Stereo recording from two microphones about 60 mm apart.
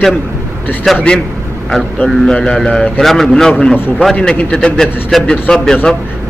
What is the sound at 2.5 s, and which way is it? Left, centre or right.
Speech, centre.